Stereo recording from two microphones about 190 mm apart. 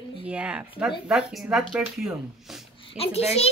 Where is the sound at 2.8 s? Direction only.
30° left (ahead or behind).